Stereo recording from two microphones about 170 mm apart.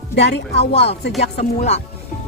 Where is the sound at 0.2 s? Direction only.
90° left.